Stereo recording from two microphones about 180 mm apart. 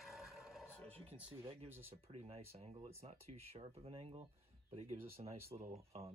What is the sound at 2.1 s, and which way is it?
Speech, 35° right (ahead or behind).